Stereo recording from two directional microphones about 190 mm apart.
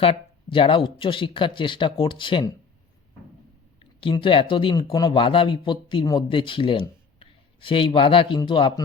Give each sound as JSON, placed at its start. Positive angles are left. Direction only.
{"t": 0.5, "sound": "speech", "side_deg": 25}
{"t": 3.8, "sound": "speech", "side_deg": 25}